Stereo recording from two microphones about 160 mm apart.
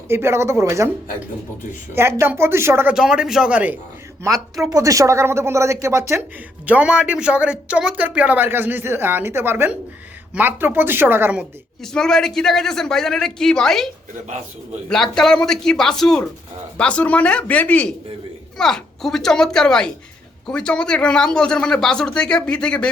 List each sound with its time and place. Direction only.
0.1 s speech: 15° right (ahead or behind)
1.9 s speech: 15° right (ahead or behind)
2.9 s speech: 5° right (ahead or behind)
4.6 s speech: 20° right (ahead or behind)
11.8 s speech: 5° left (ahead or behind)